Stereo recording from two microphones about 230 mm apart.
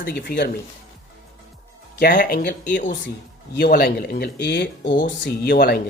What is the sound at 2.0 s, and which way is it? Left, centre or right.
Speech, left.